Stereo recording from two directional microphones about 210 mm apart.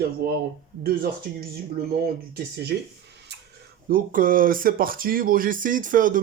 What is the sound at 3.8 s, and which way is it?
Speech, 40° right (ahead or behind).